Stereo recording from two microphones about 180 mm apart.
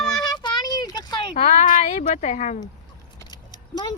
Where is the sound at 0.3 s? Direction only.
25° left (ahead or behind).